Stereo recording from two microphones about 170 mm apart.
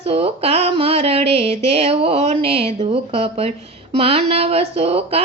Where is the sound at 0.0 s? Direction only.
35° right (ahead or behind).